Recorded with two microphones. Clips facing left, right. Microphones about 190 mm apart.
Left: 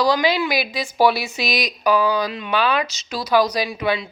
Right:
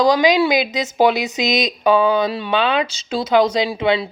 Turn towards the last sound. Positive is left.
turn(degrees=-25)  # may be behind; listen again after turning